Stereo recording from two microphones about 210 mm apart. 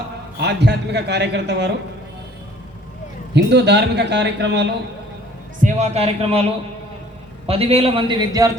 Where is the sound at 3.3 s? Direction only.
55° right (ahead or behind).